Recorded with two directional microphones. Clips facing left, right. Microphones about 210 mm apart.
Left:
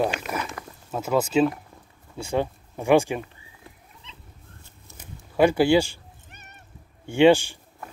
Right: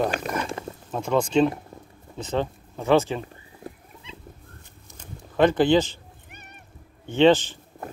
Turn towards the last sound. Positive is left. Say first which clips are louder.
# left 1 dB
turn(degrees=10)  # may be behind; listen again after turning